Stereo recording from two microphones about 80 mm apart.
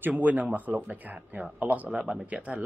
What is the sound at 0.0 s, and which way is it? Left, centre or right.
A man's voice, centre.